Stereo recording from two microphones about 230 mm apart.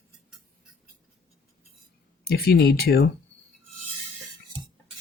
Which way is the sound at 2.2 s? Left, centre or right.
Left.